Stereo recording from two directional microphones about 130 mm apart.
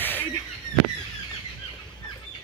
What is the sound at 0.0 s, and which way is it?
Squeal, 15° left (ahead or behind).